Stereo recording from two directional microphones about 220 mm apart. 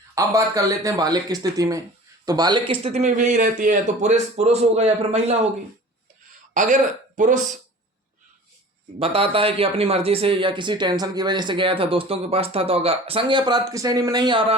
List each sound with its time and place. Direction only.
0.2 s speech: 15° right (ahead or behind)
6.5 s speech: 35° right (ahead or behind)
9.0 s speech: 25° right (ahead or behind)